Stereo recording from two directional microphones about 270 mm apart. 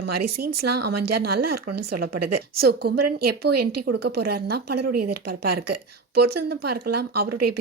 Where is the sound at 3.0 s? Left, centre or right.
Right.